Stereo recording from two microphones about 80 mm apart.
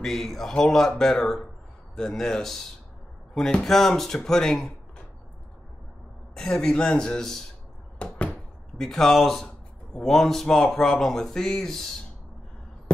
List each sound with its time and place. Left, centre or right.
0.0 s speech: centre
3.6 s speech: centre
6.3 s speech: centre
8.0 s speech: centre
8.7 s speech: centre